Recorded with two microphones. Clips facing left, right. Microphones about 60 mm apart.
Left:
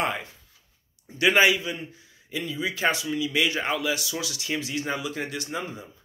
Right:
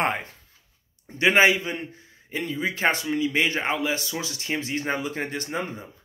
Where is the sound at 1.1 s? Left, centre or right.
Right.